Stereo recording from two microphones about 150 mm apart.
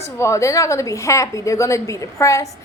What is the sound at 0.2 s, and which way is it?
A woman's voice, 20° left (ahead or behind).